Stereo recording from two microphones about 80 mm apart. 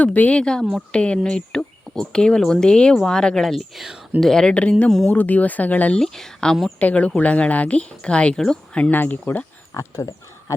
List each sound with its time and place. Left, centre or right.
0.0 s speech: centre
6.0 s speech: centre
6.7 s speech: centre
8.9 s speech: left
9.7 s speech: left